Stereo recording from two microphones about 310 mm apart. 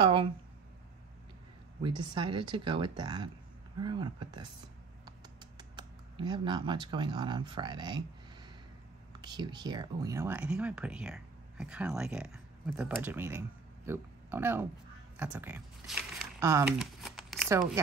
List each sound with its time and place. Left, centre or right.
0.0 s a sound: centre
1.8 s speech: centre
5.6 s speech: centre
9.2 s speech: centre